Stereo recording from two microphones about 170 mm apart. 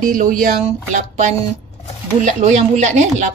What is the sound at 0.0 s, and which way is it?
Speech, 50° right (ahead or behind).